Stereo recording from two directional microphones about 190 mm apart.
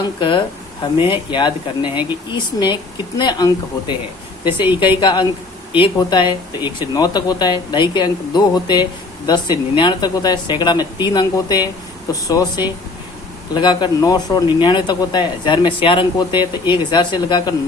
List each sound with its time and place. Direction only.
0.2 s speech: 25° left (ahead or behind)